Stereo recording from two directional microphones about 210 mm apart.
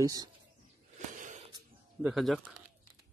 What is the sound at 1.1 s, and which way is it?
Wheeze, 35° right (ahead or behind).